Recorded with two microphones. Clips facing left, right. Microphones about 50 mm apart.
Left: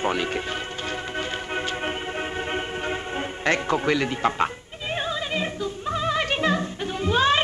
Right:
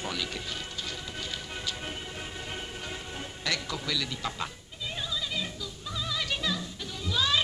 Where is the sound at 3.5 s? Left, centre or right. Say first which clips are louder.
Left 11 dB; left.